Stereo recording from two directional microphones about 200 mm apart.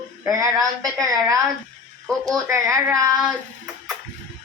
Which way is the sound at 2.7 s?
15° right (ahead or behind).